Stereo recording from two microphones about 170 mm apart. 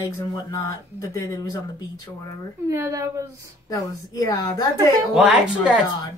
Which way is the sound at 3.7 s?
20° left (ahead or behind).